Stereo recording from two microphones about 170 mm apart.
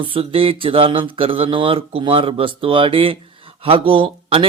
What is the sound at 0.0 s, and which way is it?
Speech, 30° right (ahead or behind).